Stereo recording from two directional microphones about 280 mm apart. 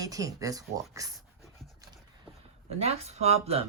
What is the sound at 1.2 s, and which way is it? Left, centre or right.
Dog, centre.